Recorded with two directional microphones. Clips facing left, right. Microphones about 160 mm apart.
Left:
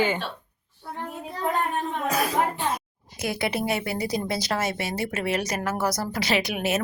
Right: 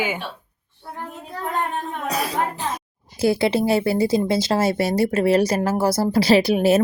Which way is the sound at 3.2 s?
30° right (ahead or behind).